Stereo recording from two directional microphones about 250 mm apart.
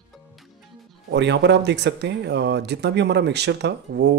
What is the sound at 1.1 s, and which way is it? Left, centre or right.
Speech, right.